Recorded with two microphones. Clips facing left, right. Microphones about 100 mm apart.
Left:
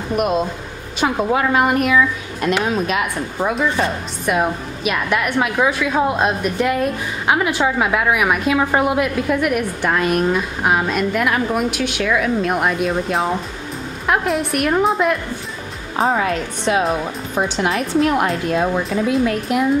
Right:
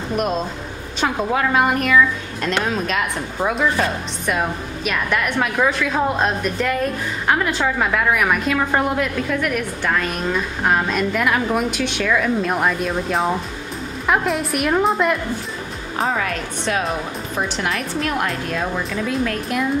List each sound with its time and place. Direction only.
0.1 s a woman's voice: 5° left (ahead or behind)
16.0 s speech: 25° left (ahead or behind)
17.6 s a woman's voice: 30° left (ahead or behind)